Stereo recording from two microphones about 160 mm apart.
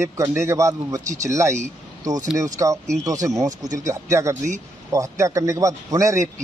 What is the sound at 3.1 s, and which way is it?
A man's voice, 20° right (ahead or behind).